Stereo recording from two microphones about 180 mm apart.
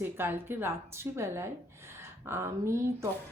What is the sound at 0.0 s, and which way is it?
A woman's voice, 10° right (ahead or behind).